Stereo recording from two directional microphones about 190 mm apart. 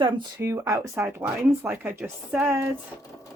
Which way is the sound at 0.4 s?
15° right (ahead or behind).